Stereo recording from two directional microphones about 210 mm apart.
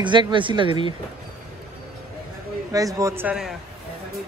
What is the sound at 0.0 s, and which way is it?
Speech, 20° right (ahead or behind).